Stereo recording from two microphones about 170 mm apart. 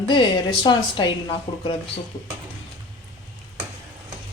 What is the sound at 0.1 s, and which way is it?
A woman's voice, 25° left (ahead or behind).